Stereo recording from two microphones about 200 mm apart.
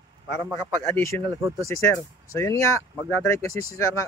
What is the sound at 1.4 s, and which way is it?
Speech, 15° right (ahead or behind).